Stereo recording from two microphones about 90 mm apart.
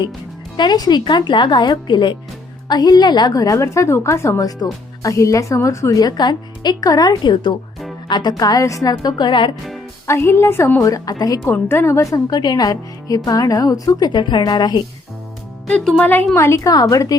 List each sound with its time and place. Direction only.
0.5 s a woman's voice: 55° left (ahead or behind)
10.1 s a woman's voice: 30° left (ahead or behind)
10.8 s a woman's voice: 40° left (ahead or behind)
11.5 s a woman's voice: 25° left (ahead or behind); by 14.1 s 45° left (ahead or behind)
14.1 s speech: 60° left (ahead or behind)
15.6 s speech: 5° left (ahead or behind)
16.3 s a woman's voice: 30° left (ahead or behind)